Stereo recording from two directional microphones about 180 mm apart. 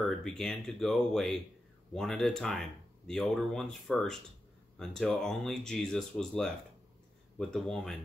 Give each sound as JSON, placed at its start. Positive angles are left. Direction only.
{"t": 0.2, "sound": "speech", "side_deg": 5}